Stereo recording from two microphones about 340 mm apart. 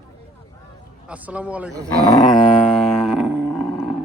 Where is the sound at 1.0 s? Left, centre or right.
Centre.